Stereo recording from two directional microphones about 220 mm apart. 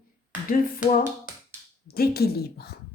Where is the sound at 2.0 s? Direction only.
45° left (ahead or behind).